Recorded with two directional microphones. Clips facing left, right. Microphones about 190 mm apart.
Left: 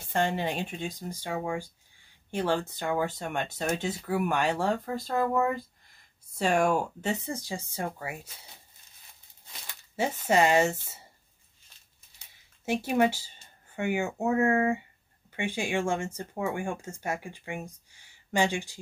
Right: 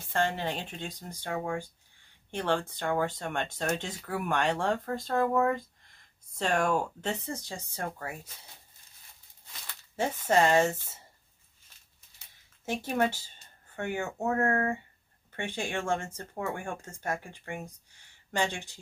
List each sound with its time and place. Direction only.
0.1 s speech: 15° left (ahead or behind)
9.7 s speech: 10° left (ahead or behind)
12.6 s speech: 10° left (ahead or behind)